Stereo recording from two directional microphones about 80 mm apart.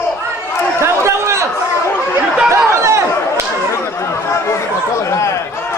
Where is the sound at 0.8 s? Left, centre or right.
Right.